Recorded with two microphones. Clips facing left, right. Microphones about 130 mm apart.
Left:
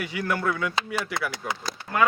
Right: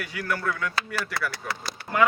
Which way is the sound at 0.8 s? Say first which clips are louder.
Left 1 dB; 20° left (ahead or behind).